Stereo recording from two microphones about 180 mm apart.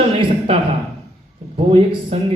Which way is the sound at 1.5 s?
30° right (ahead or behind).